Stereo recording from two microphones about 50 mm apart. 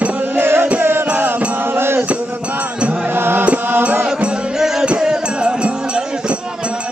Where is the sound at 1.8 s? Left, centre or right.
Right.